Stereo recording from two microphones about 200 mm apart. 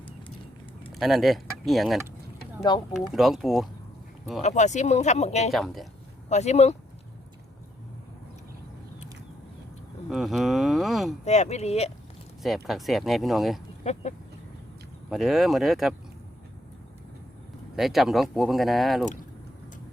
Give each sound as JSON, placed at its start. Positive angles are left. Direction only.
{"t": 0.9, "sound": "speech", "side_deg": 0}
{"t": 2.7, "sound": "speech", "side_deg": 25}
{"t": 3.1, "sound": "speech", "side_deg": 0}
{"t": 4.4, "sound": "speech", "side_deg": 35}
{"t": 5.5, "sound": "speech", "side_deg": 0}
{"t": 6.2, "sound": "speech", "side_deg": 35}
{"t": 10.1, "sound": "speech", "side_deg": 0}
{"t": 11.3, "sound": "speech", "side_deg": 35}
{"t": 12.4, "sound": "speech", "side_deg": 0}
{"t": 15.1, "sound": "speech", "side_deg": 0}
{"t": 17.7, "sound": "speech", "side_deg": 0}